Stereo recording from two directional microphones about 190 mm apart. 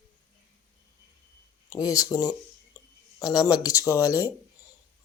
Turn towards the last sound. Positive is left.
turn(degrees=15)  # may be behind; listen again after turning